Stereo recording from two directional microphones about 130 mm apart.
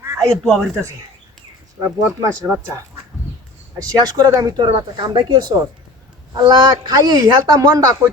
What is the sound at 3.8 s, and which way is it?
Speech, 30° right (ahead or behind).